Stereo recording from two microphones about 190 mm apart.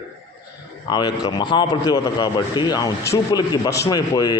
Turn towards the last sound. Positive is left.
turn(degrees=20)  # may be behind; listen again after turning